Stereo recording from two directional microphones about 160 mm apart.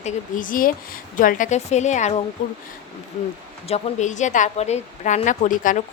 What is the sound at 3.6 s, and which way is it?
A woman's voice, 45° left (ahead or behind).